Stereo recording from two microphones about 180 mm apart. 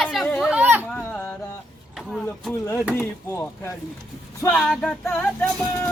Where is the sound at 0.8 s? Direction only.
5° left (ahead or behind).